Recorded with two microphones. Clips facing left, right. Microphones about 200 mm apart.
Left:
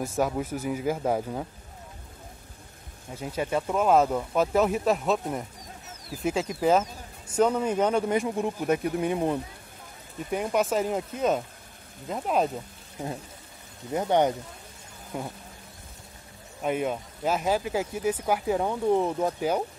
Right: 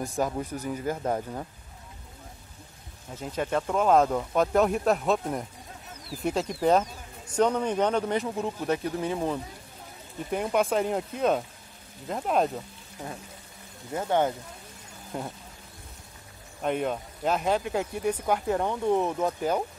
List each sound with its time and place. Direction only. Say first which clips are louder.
0.2 s speech: left 2 dB; 5° left (ahead or behind)
3.2 s speech: even; 10° left (ahead or behind)
10.3 s speech: even; centre (ahead or behind)
13.9 s speech: left 2 dB; 20° left (ahead or behind)
15.1 s speech: even; centre (ahead or behind)
16.6 s speech: even; 5° left (ahead or behind)